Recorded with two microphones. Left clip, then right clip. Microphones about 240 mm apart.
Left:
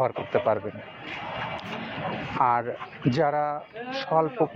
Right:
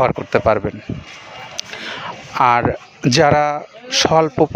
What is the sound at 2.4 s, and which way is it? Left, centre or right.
Speech, right.